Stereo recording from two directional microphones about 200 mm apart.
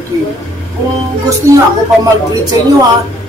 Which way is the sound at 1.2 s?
15° right (ahead or behind).